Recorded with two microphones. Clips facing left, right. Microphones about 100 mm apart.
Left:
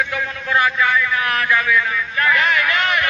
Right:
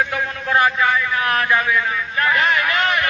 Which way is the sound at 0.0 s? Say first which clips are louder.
Right 1 dB; 35° right (ahead or behind).